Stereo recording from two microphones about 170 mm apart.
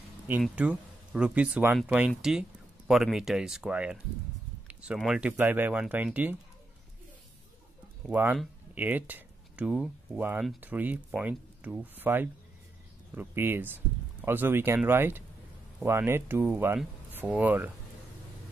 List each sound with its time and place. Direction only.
0.6 s speech: 5° right (ahead or behind)
8.1 s speech: 5° right (ahead or behind)